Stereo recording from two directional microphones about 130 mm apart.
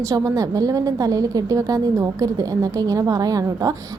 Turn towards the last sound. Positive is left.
turn(degrees=-25)  # may be behind; listen again after turning